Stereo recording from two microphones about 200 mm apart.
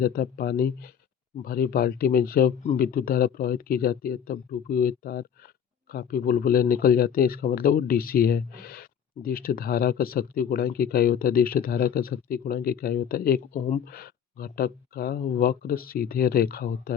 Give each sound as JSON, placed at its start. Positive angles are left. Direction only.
{"t": 0.0, "sound": "speech", "side_deg": 50}